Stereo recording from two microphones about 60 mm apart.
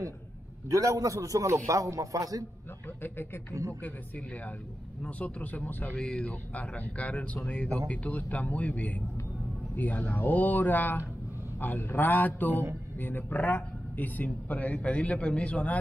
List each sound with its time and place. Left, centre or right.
0.7 s a man's voice: right
5.0 s a man's voice: left
5.9 s a man's voice: centre